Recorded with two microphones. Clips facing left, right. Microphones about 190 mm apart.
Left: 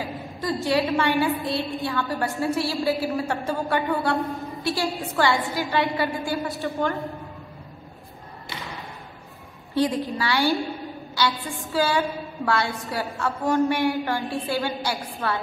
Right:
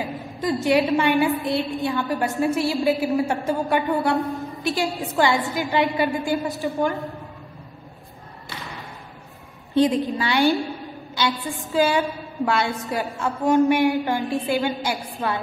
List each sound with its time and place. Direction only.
0.0 s a woman's voice: 20° right (ahead or behind)
9.8 s a woman's voice: 20° right (ahead or behind)